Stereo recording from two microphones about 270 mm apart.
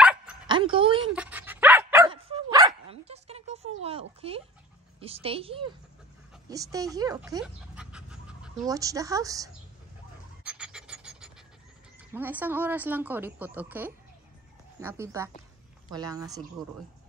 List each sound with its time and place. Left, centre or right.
0.0 s dog: centre
0.5 s a woman's voice: centre
1.1 s dog: centre; by 4.4 s right
5.0 s a woman's voice: right
7.4 s pant: centre
10.4 s filing: centre
12.1 s speech: centre